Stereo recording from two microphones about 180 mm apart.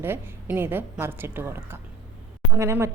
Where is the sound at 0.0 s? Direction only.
10° right (ahead or behind).